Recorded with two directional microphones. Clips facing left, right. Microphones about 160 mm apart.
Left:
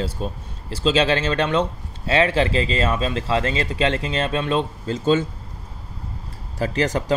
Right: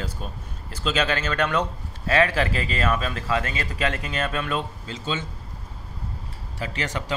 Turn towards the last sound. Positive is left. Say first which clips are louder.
# left 8 dB
turn(degrees=40)  # may be behind; listen again after turning